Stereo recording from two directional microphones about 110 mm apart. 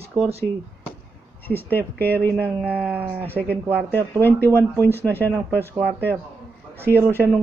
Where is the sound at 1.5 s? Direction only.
20° left (ahead or behind).